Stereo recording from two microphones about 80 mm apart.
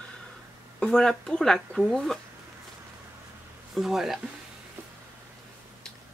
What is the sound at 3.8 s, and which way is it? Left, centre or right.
Speech, centre.